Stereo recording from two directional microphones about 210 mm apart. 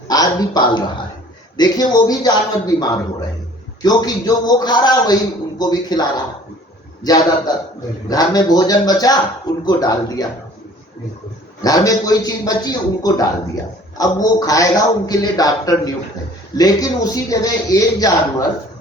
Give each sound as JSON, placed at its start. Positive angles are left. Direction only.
{"t": 0.1, "sound": "a man's voice", "side_deg": 20}
{"t": 11.6, "sound": "a man's voice", "side_deg": 15}